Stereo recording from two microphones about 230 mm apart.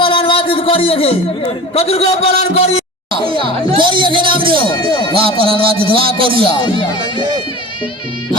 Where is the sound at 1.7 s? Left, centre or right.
Left.